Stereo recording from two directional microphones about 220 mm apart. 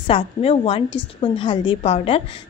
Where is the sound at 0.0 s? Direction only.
25° left (ahead or behind).